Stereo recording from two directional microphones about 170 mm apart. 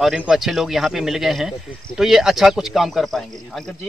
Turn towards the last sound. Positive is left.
turn(degrees=0)  # may be behind; listen again after turning